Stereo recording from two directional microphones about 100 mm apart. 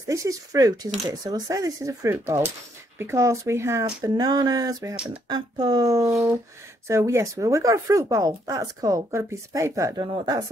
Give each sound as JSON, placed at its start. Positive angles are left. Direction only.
{"t": 0.0, "sound": "speech", "side_deg": -35}
{"t": 2.1, "sound": "speech", "side_deg": -25}
{"t": 4.0, "sound": "speech", "side_deg": -40}